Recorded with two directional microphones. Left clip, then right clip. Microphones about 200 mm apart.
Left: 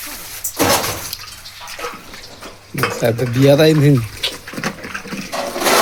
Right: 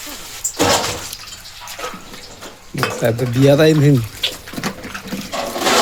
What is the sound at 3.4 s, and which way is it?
Speech, 5° left (ahead or behind).